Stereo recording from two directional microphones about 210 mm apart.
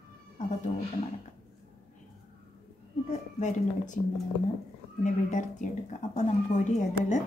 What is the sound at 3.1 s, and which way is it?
Speech, 35° left (ahead or behind).